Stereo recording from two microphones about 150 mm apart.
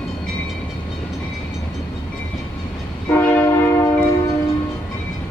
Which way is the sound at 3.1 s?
20° left (ahead or behind).